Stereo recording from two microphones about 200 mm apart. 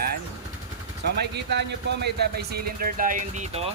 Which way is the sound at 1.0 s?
55° right (ahead or behind).